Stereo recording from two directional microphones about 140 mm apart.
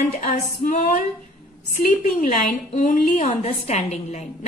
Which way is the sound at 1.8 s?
75° left (ahead or behind).